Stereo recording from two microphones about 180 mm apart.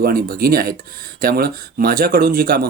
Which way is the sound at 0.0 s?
55° right (ahead or behind).